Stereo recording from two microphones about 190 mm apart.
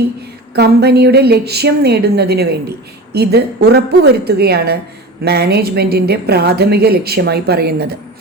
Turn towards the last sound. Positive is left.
turn(degrees=-55)  # may be behind; listen again after turning